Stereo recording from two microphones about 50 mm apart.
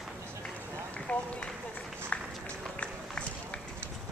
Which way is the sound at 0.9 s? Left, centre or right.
Left.